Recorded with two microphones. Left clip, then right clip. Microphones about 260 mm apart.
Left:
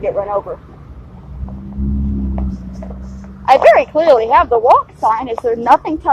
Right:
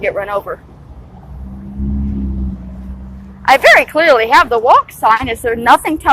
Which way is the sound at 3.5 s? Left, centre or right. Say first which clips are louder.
Right 1 dB; right.